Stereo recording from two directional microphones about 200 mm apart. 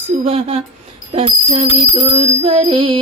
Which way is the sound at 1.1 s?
30° right (ahead or behind).